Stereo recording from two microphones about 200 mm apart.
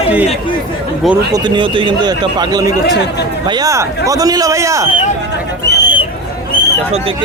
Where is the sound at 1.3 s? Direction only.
25° right (ahead or behind).